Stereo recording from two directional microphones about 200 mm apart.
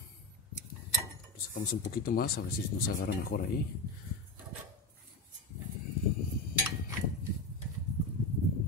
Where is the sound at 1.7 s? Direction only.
45° left (ahead or behind).